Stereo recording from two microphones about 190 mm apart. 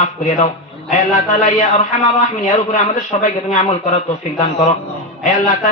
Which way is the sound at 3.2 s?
35° left (ahead or behind).